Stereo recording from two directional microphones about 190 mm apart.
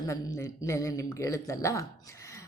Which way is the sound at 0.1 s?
15° left (ahead or behind).